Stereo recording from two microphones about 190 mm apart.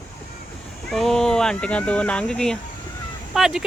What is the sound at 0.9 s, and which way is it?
Speech, centre (ahead or behind).